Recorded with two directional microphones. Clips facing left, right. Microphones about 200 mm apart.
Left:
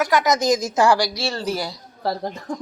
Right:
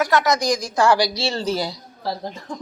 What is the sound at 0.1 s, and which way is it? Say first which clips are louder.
Speech: left 1 dB; 20° left (ahead or behind).